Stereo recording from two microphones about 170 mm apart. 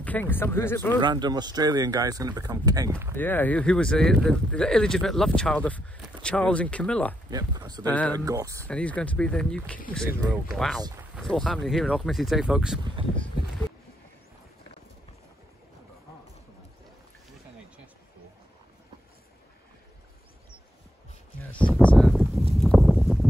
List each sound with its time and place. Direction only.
0.0 s speech: 10° left (ahead or behind)
1.0 s speech: 25° right (ahead or behind)
3.2 s speech: 10° left (ahead or behind)
7.2 s speech: 25° right (ahead or behind)
7.8 s speech: 10° left (ahead or behind)
8.3 s speech: 20° right (ahead or behind)
8.6 s speech: 5° left (ahead or behind)
21.5 s a sound: 5° left (ahead or behind)
22.5 s clip-clop: centre (ahead or behind)